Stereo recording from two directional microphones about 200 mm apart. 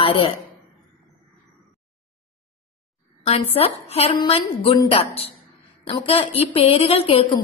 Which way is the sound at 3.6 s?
30° left (ahead or behind).